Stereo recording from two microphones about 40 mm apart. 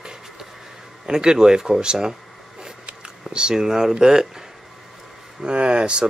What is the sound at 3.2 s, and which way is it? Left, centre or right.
Speech, centre.